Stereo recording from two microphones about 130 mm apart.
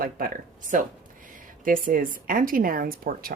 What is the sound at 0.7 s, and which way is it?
A woman's voice, 80° right.